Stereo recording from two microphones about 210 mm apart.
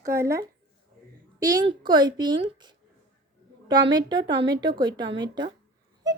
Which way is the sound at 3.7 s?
20° right (ahead or behind).